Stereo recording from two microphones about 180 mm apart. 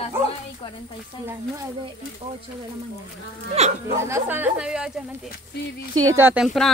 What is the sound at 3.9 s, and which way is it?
Speech, 15° right (ahead or behind).